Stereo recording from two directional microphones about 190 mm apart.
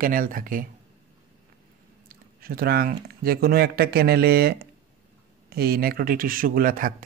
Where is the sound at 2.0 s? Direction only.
50° right (ahead or behind).